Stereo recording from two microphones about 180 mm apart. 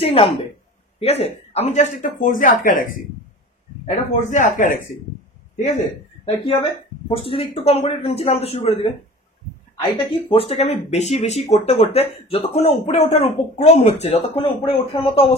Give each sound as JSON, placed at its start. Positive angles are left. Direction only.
{"t": 0.0, "sound": "speech", "side_deg": 35}
{"t": 6.2, "sound": "speech", "side_deg": 35}
{"t": 9.8, "sound": "speech", "side_deg": 30}